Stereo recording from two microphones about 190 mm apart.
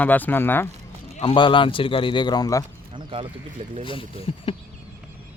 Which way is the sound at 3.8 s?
25° left (ahead or behind).